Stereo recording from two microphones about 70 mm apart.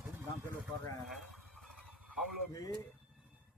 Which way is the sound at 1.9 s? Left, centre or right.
Centre.